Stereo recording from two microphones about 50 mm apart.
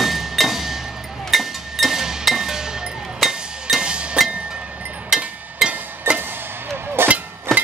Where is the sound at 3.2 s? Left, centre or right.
Centre.